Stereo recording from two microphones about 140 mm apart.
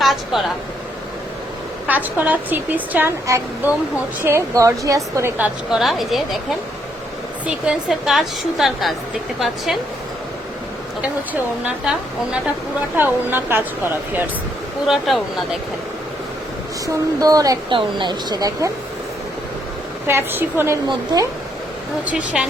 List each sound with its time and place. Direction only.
0.0 s speech: centre (ahead or behind)
1.9 s speech: 10° right (ahead or behind)
5.4 s a woman's voice: centre (ahead or behind)
7.4 s a woman's voice: 5° right (ahead or behind)
11.6 s speech: 10° right (ahead or behind)
14.8 s a woman's voice: centre (ahead or behind)
16.8 s speech: 25° right (ahead or behind)
20.1 s speech: 15° right (ahead or behind)
22.0 s speech: 10° right (ahead or behind)